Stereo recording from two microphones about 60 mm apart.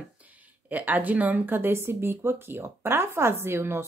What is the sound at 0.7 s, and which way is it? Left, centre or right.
Speech, right.